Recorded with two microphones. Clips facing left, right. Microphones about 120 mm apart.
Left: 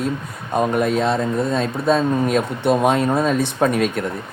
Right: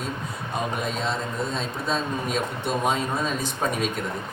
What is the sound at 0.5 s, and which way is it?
Speech, 50° left (ahead or behind).